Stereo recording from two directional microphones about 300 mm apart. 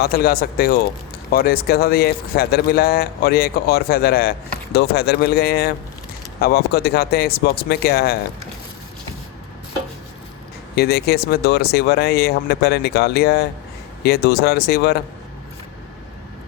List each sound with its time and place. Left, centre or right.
0.0 s speech: left
10.8 s speech: left